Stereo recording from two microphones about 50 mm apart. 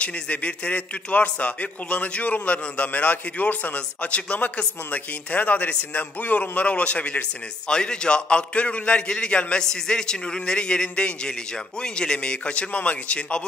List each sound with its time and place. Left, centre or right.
0.0 s speech: left